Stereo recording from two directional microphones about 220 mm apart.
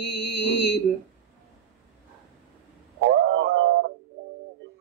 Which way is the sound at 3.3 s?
55° right (ahead or behind).